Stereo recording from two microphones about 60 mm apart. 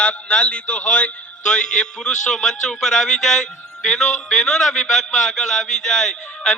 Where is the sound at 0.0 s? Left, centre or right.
Left.